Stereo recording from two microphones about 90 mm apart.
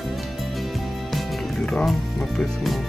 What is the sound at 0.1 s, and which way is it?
Music, centre (ahead or behind).